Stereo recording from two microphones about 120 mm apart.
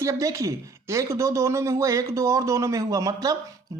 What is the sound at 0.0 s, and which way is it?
Speech, 25° right (ahead or behind).